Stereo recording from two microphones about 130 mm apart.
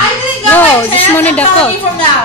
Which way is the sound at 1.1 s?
10° left (ahead or behind).